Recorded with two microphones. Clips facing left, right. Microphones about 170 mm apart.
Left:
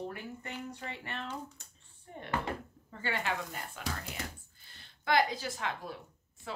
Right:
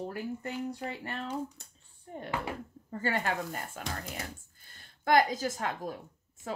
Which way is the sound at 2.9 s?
40° right (ahead or behind).